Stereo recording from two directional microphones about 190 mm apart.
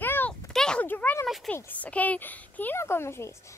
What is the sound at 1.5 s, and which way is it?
A woman's voice, 10° left (ahead or behind).